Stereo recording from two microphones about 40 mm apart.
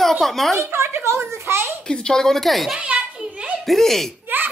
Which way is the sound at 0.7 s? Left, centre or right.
Right.